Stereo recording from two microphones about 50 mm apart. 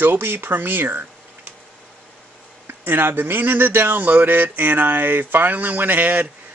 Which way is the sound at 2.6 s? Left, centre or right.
Right.